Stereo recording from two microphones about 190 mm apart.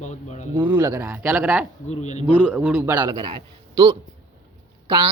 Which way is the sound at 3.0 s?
25° right (ahead or behind).